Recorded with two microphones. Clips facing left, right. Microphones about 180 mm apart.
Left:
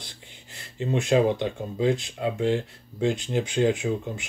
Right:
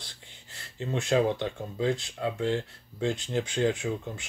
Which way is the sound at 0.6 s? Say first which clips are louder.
Left 5 dB; 15° left (ahead or behind).